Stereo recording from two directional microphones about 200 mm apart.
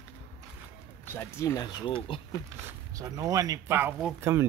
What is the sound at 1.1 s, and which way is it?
Speech, 15° left (ahead or behind).